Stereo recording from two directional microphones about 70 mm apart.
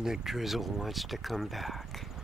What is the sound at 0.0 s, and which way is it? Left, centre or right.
Speech, centre.